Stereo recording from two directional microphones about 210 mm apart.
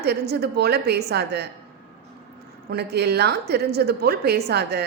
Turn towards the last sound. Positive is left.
turn(degrees=-50)  # may be behind; listen again after turning